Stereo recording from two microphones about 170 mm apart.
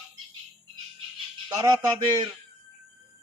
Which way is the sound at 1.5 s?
20° right (ahead or behind).